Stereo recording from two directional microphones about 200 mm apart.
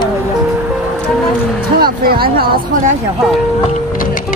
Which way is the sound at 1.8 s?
50° right (ahead or behind).